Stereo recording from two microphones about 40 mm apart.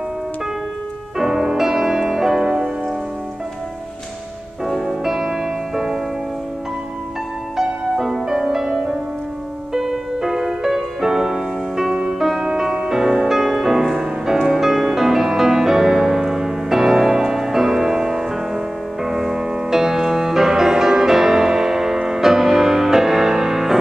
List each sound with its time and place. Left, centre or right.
1.1 s music: centre
4.8 s music: centre
7.5 s music: centre
11.9 s music: right